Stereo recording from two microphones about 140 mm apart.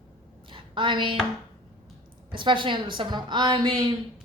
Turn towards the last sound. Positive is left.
turn(degrees=-35)  # may be behind; listen again after turning